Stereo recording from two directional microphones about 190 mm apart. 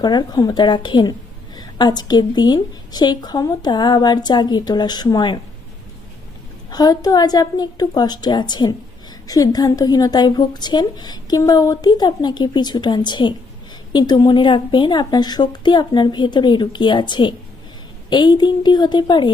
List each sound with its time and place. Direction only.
0.0 s a woman's voice: 20° left (ahead or behind)
6.7 s a woman's voice: 20° left (ahead or behind)